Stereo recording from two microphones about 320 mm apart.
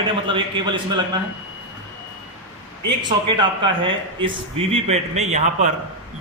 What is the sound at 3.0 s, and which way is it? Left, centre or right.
A man's voice, centre.